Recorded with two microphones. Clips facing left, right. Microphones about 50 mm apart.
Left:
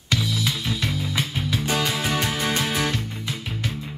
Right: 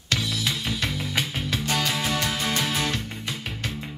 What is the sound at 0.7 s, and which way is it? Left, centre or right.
Music, right.